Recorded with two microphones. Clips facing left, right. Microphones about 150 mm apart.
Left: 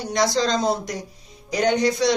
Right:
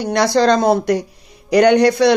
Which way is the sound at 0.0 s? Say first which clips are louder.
Right 7 dB; 65° right (ahead or behind).